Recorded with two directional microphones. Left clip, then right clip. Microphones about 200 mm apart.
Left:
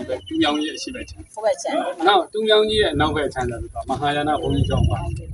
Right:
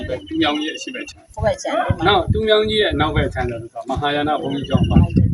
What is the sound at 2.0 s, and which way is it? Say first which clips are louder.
Speech: left 1 dB; 10° right (ahead or behind).